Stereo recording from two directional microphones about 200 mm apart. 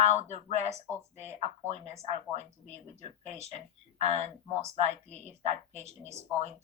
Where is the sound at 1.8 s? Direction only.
35° right (ahead or behind).